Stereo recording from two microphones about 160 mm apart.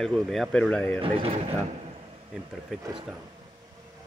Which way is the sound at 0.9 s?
35° right (ahead or behind).